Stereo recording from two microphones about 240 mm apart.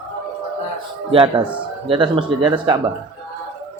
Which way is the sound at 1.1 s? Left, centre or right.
Right.